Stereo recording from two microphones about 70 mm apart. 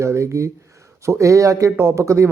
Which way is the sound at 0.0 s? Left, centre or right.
Right.